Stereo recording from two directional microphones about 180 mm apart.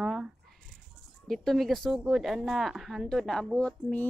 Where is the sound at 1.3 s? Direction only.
Centre (ahead or behind).